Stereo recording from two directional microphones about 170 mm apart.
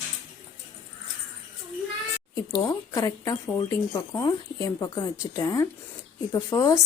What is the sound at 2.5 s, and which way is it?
Speech, 20° left (ahead or behind).